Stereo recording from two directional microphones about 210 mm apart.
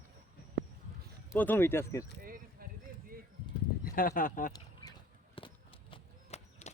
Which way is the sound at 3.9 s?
40° left (ahead or behind).